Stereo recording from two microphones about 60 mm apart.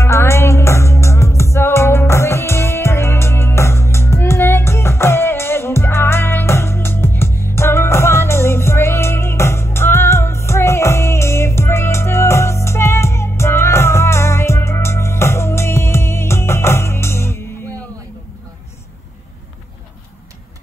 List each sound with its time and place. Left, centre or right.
0.0 s music: left